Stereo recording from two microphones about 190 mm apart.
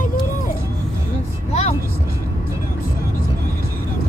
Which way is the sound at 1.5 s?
35° left (ahead or behind).